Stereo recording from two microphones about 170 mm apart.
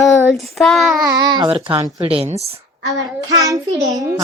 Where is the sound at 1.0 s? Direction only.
20° right (ahead or behind).